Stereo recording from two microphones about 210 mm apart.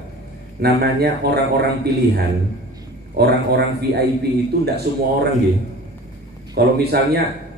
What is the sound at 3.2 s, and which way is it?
A man's voice, 50° right (ahead or behind).